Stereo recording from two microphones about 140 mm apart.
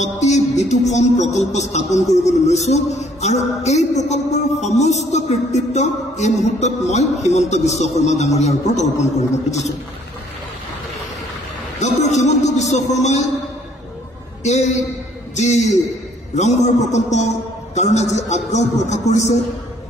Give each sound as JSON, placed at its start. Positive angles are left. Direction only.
{"t": 0.0, "sound": "speech", "side_deg": 55}
{"t": 11.8, "sound": "speech", "side_deg": 55}
{"t": 14.4, "sound": "speech", "side_deg": 55}